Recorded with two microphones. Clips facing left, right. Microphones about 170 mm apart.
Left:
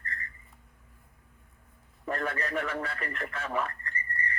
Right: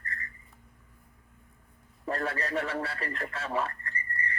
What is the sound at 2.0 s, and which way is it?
Radio, 30° right (ahead or behind).